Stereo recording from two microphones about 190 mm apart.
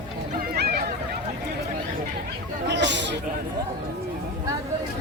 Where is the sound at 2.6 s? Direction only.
70° right (ahead or behind).